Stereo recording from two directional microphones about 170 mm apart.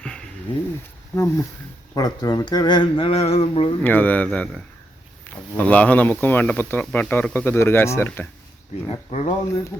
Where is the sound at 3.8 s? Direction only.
10° left (ahead or behind).